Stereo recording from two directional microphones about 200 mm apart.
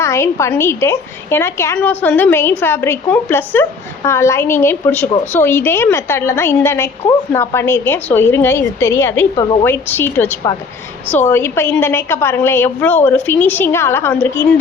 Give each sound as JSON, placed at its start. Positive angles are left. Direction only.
{"t": 0.0, "sound": "a woman's voice", "side_deg": 15}
{"t": 9.3, "sound": "a woman's voice", "side_deg": 20}
{"t": 9.6, "sound": "a woman's voice", "side_deg": 10}